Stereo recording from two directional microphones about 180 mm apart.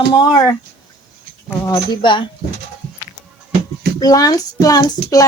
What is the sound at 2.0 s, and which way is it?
Speech, 25° left (ahead or behind).